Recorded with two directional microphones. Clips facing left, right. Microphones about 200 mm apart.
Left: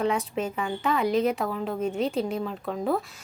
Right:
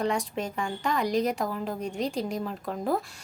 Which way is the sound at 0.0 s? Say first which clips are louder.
Left 2 dB; centre (ahead or behind).